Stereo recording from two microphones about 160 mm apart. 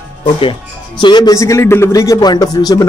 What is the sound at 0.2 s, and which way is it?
A man's voice, 35° left (ahead or behind).